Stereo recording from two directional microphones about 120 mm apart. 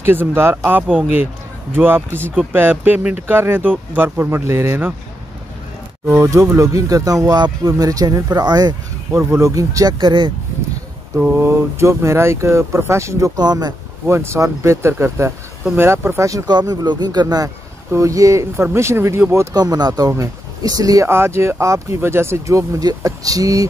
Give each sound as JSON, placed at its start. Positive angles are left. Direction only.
{"t": 0.0, "sound": "a man's voice", "side_deg": -20}
{"t": 6.1, "sound": "speech", "side_deg": -25}
{"t": 9.1, "sound": "speech", "side_deg": -20}
{"t": 11.1, "sound": "speech", "side_deg": -15}
{"t": 13.4, "sound": "speech", "side_deg": -35}
{"t": 14.0, "sound": "speech", "side_deg": -25}